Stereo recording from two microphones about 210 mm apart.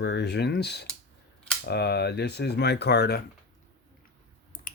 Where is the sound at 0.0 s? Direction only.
55° left (ahead or behind).